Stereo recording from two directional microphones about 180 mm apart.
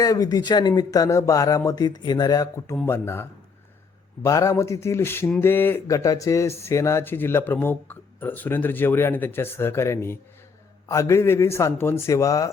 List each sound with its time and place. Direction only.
0.0 s speech: 20° left (ahead or behind)